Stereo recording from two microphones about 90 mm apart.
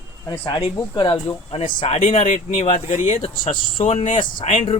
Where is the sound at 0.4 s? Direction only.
60° left (ahead or behind).